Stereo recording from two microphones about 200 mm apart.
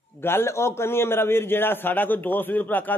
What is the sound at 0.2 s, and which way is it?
Speech, 10° left (ahead or behind).